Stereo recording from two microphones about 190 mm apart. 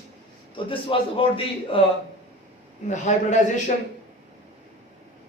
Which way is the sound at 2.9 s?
40° left (ahead or behind).